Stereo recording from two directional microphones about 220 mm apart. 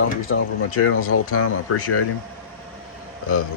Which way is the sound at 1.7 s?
90° left.